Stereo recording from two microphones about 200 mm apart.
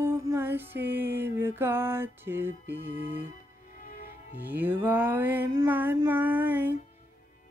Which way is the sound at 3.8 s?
45° left (ahead or behind).